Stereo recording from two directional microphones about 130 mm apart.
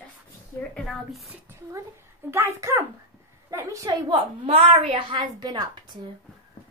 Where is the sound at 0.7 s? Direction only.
Centre (ahead or behind).